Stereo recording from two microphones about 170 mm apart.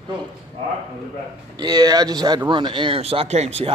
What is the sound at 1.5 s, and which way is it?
Speech, 20° right (ahead or behind).